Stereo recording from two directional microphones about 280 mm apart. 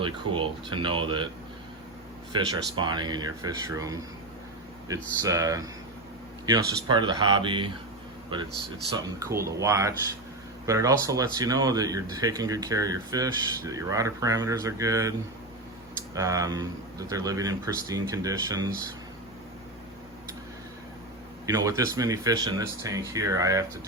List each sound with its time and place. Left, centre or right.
0.0 s a man's voice: centre
2.3 s a man's voice: centre
9.1 s a man's voice: centre
16.1 s a man's voice: centre
21.4 s a man's voice: centre